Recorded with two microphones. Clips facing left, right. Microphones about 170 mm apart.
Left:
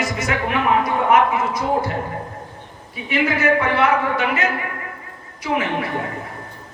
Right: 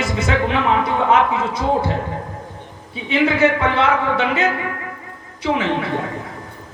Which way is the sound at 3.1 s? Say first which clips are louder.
Right 3 dB; 25° right (ahead or behind).